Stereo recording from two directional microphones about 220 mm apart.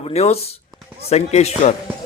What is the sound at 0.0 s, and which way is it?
Speech, 30° left (ahead or behind).